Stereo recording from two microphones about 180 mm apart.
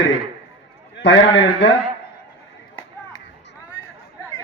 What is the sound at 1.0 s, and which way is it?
Speech, 75° left (ahead or behind).